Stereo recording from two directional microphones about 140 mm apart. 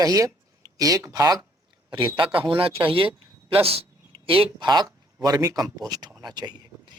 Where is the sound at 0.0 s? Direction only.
25° right (ahead or behind).